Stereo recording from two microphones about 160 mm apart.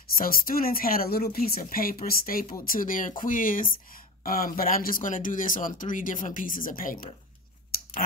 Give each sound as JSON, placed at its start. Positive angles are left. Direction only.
{"t": 0.1, "sound": "speech", "side_deg": 65}